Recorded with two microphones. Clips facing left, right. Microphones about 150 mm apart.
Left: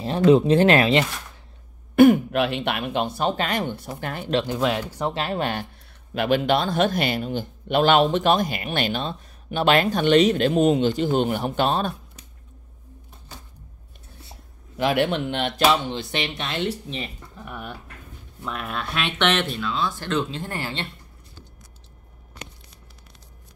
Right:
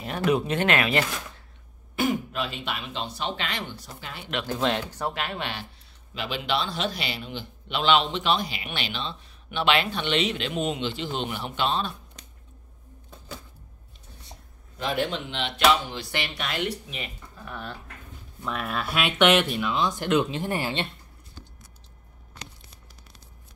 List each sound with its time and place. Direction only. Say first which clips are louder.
0.0 s speech: left 8 dB; 30° left (ahead or behind)
2.0 s speech: left 12 dB; 60° left (ahead or behind)
4.5 s speech: left 3 dB; 5° left (ahead or behind)
5.1 s a man's voice: left 7 dB; 35° left (ahead or behind)
14.8 s speech: left 6 dB; 75° left (ahead or behind); by 15.5 s 55° left (ahead or behind)
15.5 s speech: left 1 dB; 35° left (ahead or behind)
16.0 s speech: left 4 dB; 20° left (ahead or behind)
17.4 s speech: left 2 dB; 15° left (ahead or behind)
18.4 s speech: even; centre (ahead or behind); by 20.9 s 20° right (ahead or behind)